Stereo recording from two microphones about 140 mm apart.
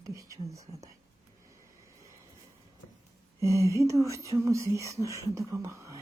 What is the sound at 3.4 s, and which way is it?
Speech, 20° right (ahead or behind).